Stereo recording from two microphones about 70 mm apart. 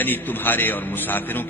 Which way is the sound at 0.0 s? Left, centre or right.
Left.